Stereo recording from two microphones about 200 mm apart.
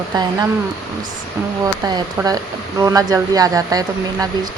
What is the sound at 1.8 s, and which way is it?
Speech, 20° right (ahead or behind).